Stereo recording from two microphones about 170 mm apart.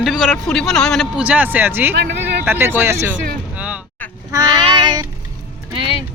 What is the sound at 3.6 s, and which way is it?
Music, 5° right (ahead or behind).